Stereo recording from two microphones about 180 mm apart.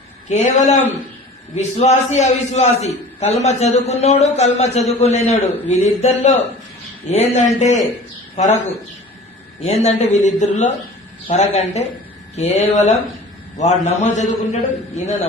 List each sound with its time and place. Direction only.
0.3 s a man's voice: 40° left (ahead or behind)